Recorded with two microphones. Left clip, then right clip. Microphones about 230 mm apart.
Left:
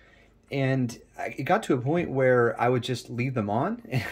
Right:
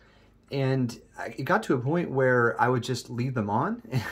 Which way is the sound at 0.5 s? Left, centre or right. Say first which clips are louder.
Left 1 dB; centre.